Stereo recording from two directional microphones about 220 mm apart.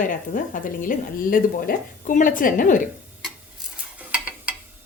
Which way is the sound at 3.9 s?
5° right (ahead or behind).